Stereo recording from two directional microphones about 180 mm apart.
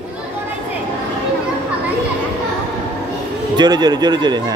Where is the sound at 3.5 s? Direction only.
20° right (ahead or behind).